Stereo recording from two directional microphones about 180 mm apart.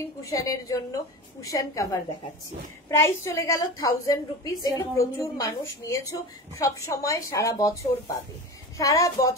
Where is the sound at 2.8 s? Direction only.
15° left (ahead or behind).